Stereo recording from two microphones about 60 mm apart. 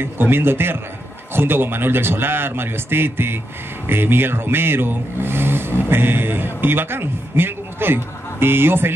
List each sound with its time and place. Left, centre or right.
0.0 s a man's voice: right